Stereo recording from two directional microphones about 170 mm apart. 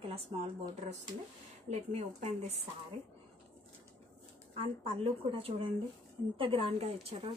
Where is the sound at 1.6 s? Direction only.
40° right (ahead or behind).